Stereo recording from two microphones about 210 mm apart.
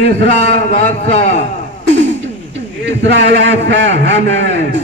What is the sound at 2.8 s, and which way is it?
A man's voice, 55° right (ahead or behind).